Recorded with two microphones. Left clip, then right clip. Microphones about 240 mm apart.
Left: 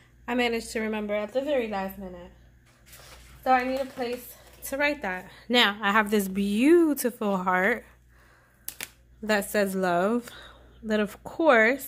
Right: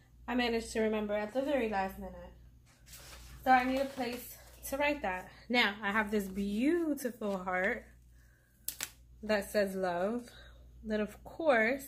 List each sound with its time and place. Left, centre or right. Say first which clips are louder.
0.2 s a woman's voice: left 7 dB; left
4.6 s a woman's voice: left 6 dB; left
8.6 s camera: left 3 dB; centre
9.2 s a woman's voice: left 6 dB; left